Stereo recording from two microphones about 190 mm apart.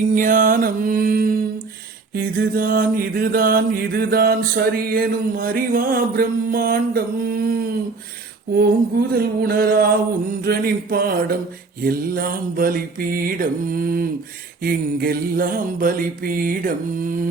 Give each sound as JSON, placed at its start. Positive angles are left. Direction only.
{"t": 0.1, "sound": "mantra", "side_deg": -45}
{"t": 9.1, "sound": "mantra", "side_deg": -55}